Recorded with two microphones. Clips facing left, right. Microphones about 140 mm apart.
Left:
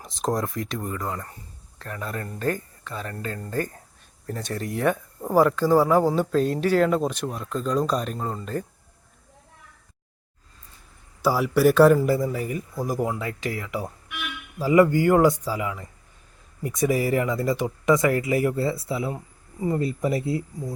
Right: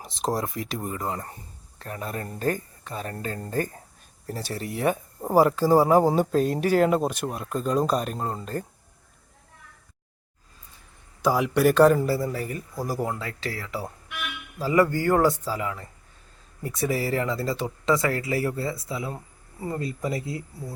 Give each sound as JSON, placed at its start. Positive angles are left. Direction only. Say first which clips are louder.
{"t": 0.0, "sound": "speech", "louder": "left 1 dB", "side_deg": -5}
{"t": 4.4, "sound": "speech", "louder": "left 1 dB", "side_deg": -5}
{"t": 5.2, "sound": "speech", "louder": "even", "side_deg": -15}
{"t": 6.1, "sound": "speech", "louder": "even", "side_deg": -45}
{"t": 6.4, "sound": "speech", "louder": "left 2 dB", "side_deg": -10}
{"t": 11.2, "sound": "speech", "louder": "left 1 dB", "side_deg": 5}